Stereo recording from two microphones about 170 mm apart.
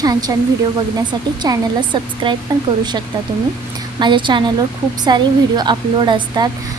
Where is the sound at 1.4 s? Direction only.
25° right (ahead or behind).